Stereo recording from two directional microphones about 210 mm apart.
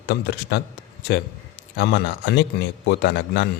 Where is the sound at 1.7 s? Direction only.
50° left (ahead or behind).